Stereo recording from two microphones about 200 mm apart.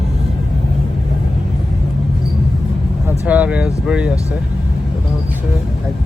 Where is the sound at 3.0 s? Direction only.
5° right (ahead or behind).